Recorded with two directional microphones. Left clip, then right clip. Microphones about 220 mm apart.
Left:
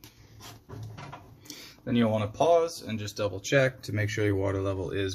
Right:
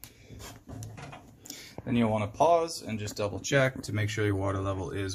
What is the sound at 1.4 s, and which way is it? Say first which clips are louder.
Speech: even; 5° right (ahead or behind).